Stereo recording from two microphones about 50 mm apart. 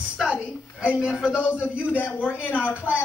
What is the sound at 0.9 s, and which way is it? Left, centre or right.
Speech, centre.